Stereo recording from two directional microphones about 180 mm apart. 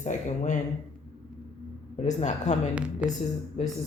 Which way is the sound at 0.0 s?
40° left (ahead or behind).